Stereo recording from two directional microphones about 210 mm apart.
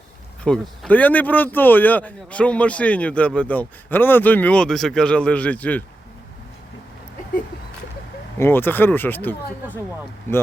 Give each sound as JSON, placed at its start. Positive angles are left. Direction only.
{"t": 0.4, "sound": "speech", "side_deg": 0}
{"t": 8.4, "sound": "speech", "side_deg": 10}